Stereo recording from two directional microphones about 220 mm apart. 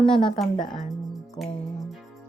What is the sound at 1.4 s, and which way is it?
Speech, 5° left (ahead or behind).